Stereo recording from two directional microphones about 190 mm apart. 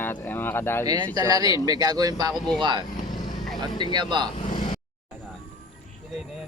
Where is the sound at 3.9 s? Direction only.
25° right (ahead or behind).